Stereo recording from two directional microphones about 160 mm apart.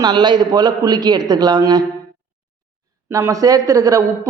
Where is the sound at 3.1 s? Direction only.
15° right (ahead or behind).